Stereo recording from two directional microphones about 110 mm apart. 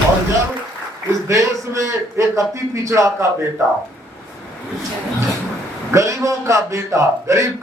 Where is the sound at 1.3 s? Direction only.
30° right (ahead or behind).